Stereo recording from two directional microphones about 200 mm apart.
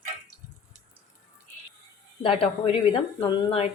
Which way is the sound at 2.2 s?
25° left (ahead or behind).